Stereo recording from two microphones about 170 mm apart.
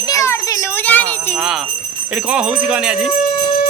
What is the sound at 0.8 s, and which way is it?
Speech, 10° left (ahead or behind).